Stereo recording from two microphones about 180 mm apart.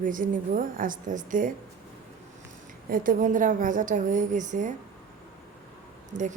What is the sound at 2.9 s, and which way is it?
Speech, 50° right (ahead or behind).